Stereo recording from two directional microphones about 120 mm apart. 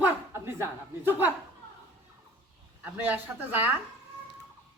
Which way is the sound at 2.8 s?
15° right (ahead or behind).